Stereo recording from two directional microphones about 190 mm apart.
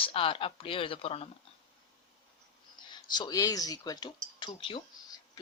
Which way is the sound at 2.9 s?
25° left (ahead or behind).